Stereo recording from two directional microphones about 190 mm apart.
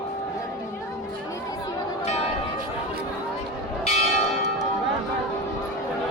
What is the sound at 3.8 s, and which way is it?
Church bell, 35° left (ahead or behind).